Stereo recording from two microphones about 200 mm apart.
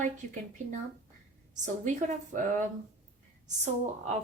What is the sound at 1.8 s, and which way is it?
Speech, 40° right (ahead or behind).